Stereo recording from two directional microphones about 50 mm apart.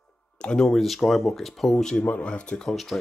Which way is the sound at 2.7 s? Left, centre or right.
Centre.